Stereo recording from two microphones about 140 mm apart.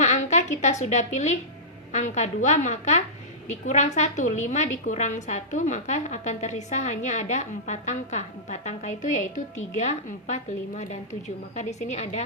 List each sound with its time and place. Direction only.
0.0 s a woman's voice: 55° left (ahead or behind)